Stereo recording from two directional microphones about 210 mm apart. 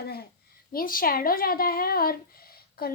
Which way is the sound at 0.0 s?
50° left (ahead or behind).